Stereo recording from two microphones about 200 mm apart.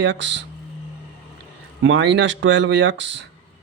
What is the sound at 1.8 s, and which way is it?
Speech, 65° right (ahead or behind).